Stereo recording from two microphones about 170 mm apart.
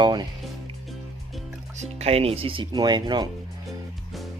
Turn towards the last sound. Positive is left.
turn(degrees=-25)  # may be behind; listen again after turning